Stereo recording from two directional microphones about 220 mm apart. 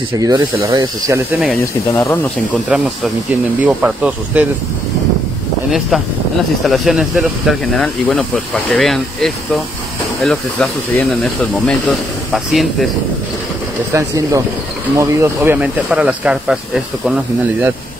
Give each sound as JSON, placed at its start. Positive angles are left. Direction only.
{"t": 0.2, "sound": "speech", "side_deg": -15}
{"t": 1.6, "sound": "speech", "side_deg": 15}
{"t": 3.6, "sound": "speech", "side_deg": -5}
{"t": 5.7, "sound": "speech", "side_deg": 0}
{"t": 13.9, "sound": "speech", "side_deg": -15}